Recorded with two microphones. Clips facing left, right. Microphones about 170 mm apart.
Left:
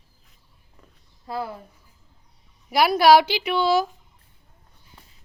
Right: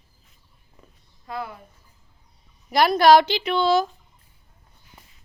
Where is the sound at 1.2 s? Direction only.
35° left (ahead or behind).